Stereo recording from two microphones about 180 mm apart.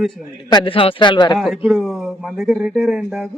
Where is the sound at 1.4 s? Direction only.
Centre (ahead or behind).